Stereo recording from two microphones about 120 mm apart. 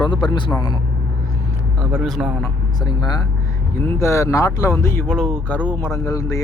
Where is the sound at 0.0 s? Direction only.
35° left (ahead or behind).